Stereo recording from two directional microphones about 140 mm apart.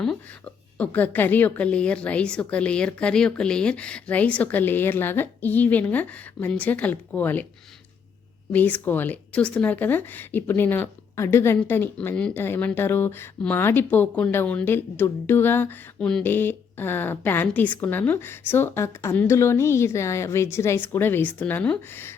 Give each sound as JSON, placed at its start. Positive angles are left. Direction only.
{"t": 0.8, "sound": "speech", "side_deg": 10}
{"t": 8.5, "sound": "speech", "side_deg": 10}